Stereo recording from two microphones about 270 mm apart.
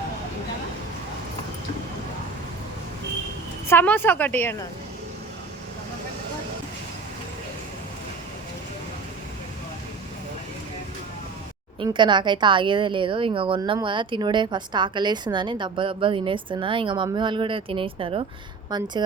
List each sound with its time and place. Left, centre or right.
3.7 s a woman's voice: centre
11.8 s speech: centre